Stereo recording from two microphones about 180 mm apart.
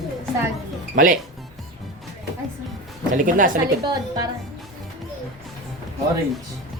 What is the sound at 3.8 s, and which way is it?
Speech, 20° right (ahead or behind).